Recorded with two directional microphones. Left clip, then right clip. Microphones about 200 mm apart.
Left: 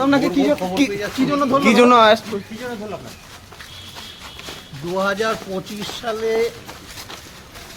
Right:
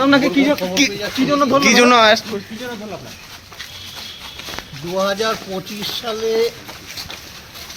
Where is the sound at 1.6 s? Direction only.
Centre (ahead or behind).